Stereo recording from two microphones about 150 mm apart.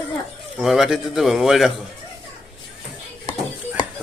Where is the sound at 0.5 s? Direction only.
Centre (ahead or behind).